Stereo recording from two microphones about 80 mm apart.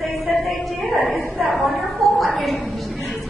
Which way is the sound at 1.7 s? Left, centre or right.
Centre.